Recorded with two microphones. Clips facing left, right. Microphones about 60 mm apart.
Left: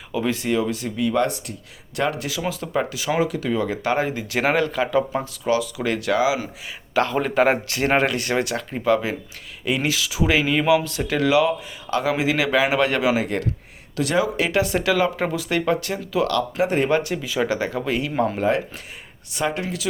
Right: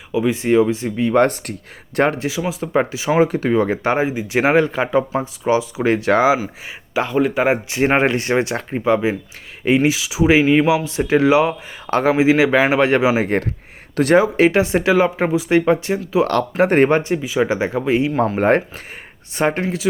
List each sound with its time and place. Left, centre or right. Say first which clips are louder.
0.1 s speech: right 5 dB; centre
0.4 s speech: right 7 dB; right
2.4 s speech: right 5 dB; centre; by 3.9 s right
3.9 s speech: right 4 dB; centre; by 6.4 s right
6.9 s speech: right 2 dB; centre
7.8 s speech: right 4 dB; right
9.9 s speech: right 6 dB; centre
13.2 s speech: right 5 dB; right
16.3 s speech: right 5 dB; right
16.9 s speech: right 4 dB; right
18.1 s speech: right 3 dB; centre
18.3 s speech: right 6 dB; right